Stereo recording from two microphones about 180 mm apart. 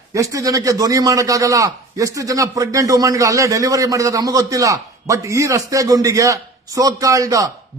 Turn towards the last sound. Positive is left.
turn(degrees=-20)  # may be behind; listen again after turning